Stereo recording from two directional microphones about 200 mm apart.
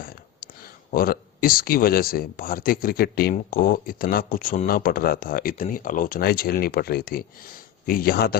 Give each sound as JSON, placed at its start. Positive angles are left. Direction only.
{"t": 0.9, "sound": "speech", "side_deg": 45}